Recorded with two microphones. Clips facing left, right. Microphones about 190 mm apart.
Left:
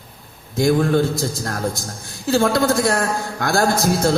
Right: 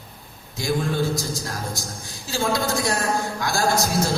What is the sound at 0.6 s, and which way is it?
Speech, 55° left (ahead or behind).